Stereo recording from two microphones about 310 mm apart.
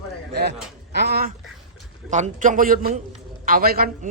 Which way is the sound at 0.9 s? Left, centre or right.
Right.